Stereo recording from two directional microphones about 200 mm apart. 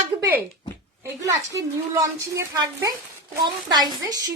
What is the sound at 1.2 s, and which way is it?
A woman's voice, 15° right (ahead or behind).